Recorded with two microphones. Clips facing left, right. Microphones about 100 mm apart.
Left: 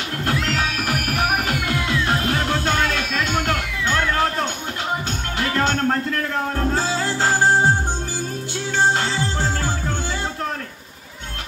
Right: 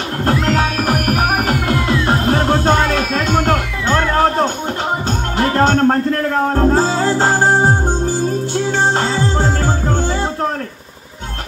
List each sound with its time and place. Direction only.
0.2 s music: 40° right (ahead or behind)
8.7 s music: 40° right (ahead or behind)